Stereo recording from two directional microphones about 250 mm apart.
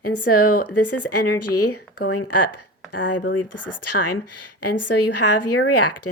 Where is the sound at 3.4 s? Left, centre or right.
Left.